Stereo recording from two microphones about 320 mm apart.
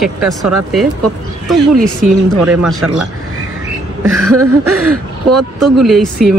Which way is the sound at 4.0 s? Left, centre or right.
Right.